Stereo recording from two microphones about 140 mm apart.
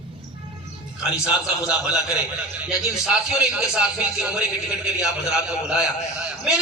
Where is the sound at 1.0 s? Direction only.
5° right (ahead or behind).